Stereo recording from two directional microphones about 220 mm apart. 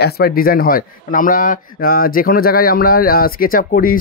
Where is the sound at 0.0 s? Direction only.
45° left (ahead or behind).